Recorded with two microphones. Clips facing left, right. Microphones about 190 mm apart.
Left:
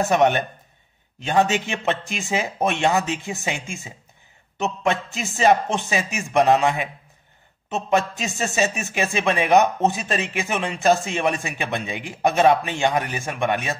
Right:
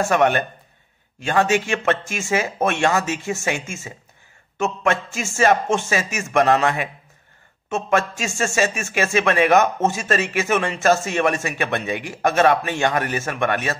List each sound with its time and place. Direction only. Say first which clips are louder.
1.3 s a man's voice: right 1 dB; 20° left (ahead or behind)
7.7 s a man's voice: right 1 dB; 20° left (ahead or behind)